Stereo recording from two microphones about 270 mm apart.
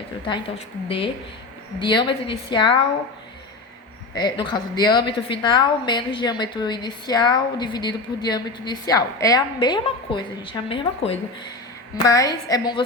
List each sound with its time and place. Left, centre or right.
0.3 s a woman's voice: centre
4.1 s a woman's voice: centre